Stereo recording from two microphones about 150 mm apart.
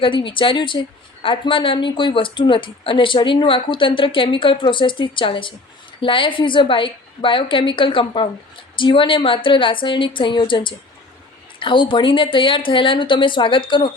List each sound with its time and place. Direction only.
0.0 s a woman's voice: 35° left (ahead or behind)